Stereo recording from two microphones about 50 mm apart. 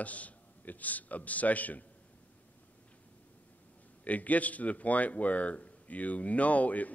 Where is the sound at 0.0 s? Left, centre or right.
Left.